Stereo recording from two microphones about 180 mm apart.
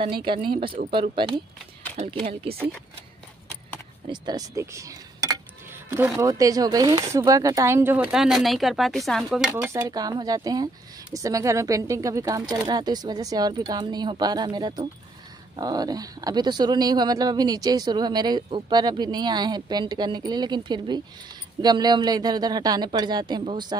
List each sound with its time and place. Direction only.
0.0 s speech: 25° right (ahead or behind)
2.0 s speech: 40° right (ahead or behind)
4.1 s speech: 20° right (ahead or behind); by 9.5 s centre (ahead or behind)
9.6 s speech: 15° right (ahead or behind)